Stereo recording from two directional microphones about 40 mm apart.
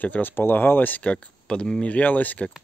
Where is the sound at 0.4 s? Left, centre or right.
Left.